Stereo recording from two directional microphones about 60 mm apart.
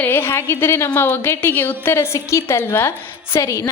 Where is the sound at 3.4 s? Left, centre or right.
Left.